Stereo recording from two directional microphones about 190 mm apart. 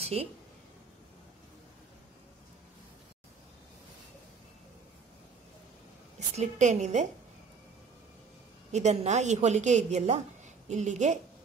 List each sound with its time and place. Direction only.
0.0 s speech: 30° right (ahead or behind)
6.1 s a woman's voice: 35° right (ahead or behind)
8.7 s a woman's voice: 35° right (ahead or behind)